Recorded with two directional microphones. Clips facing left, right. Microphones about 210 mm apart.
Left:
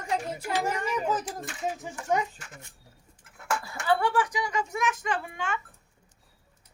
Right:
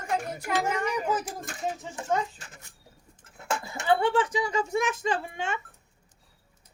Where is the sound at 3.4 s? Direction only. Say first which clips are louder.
Even; 25° right (ahead or behind).